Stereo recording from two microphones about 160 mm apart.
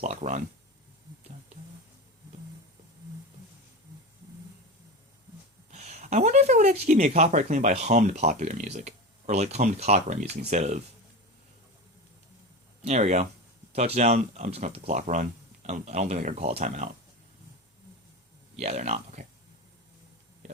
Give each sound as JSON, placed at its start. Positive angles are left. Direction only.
{"t": 0.0, "sound": "speech", "side_deg": -50}
{"t": 5.7, "sound": "speech", "side_deg": -45}
{"t": 12.8, "sound": "speech", "side_deg": -45}
{"t": 18.6, "sound": "speech", "side_deg": -45}